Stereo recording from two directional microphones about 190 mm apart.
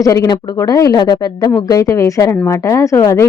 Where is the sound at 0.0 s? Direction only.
15° left (ahead or behind).